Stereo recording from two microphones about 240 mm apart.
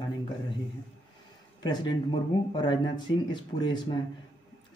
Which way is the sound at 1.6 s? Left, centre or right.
Centre.